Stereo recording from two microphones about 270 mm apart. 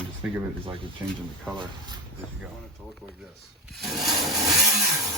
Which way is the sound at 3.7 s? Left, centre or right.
Centre.